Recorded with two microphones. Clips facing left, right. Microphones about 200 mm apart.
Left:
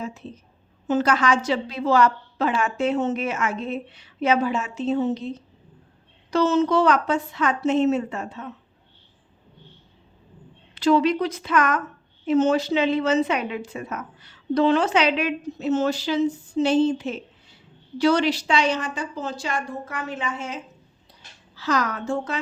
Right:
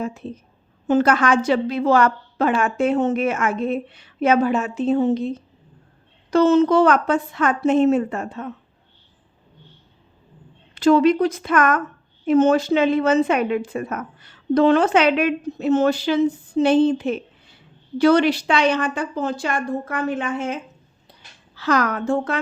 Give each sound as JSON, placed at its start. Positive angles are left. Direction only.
{"t": 0.0, "sound": "a woman's voice", "side_deg": -55}
{"t": 10.8, "sound": "a woman's voice", "side_deg": -50}